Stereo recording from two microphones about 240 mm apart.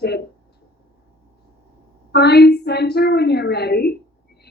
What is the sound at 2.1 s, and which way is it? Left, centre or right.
A woman's voice, left.